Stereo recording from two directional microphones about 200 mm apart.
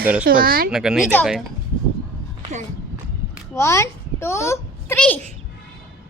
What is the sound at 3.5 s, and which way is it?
A child's voice, 15° left (ahead or behind).